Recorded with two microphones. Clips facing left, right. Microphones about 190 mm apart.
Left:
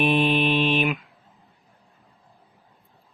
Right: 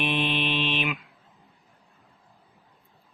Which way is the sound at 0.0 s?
45° left (ahead or behind).